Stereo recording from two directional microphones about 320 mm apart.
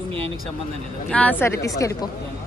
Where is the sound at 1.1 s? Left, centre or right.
Centre.